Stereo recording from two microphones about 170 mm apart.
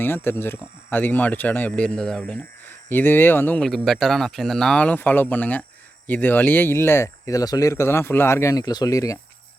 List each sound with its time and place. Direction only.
0.0 s speech: 15° left (ahead or behind)